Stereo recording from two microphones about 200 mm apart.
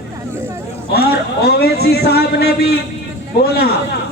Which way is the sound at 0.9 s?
50° left (ahead or behind).